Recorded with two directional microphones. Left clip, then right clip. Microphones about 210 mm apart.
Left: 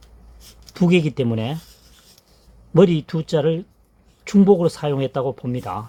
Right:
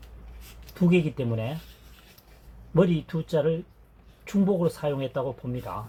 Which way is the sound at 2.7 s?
60° left (ahead or behind).